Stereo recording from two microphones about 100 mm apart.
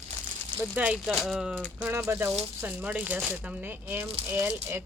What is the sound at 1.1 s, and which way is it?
Speech, centre (ahead or behind).